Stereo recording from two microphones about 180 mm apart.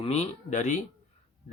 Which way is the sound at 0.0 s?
35° left (ahead or behind).